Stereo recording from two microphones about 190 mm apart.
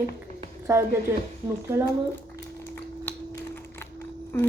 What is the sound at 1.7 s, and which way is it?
Speech, 15° right (ahead or behind).